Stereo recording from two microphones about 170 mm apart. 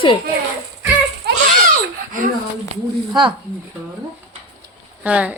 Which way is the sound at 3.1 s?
30° right (ahead or behind).